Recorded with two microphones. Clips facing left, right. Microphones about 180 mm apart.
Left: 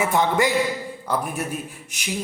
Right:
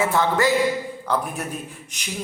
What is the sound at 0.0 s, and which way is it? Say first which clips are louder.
Speech: even; 15° left (ahead or behind).